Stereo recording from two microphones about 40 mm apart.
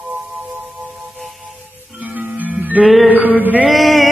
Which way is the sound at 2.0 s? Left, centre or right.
Right.